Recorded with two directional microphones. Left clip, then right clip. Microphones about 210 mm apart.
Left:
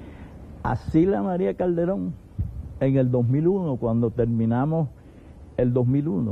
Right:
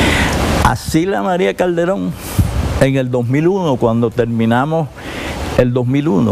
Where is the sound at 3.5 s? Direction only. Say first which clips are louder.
Right 11 dB; 40° right (ahead or behind).